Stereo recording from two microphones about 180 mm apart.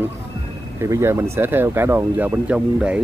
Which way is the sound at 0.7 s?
15° right (ahead or behind).